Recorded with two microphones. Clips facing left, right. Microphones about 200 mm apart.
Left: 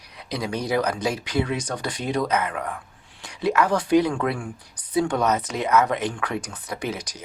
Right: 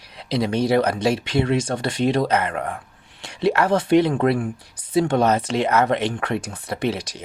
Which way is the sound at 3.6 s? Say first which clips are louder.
Right 2 dB; 25° right (ahead or behind).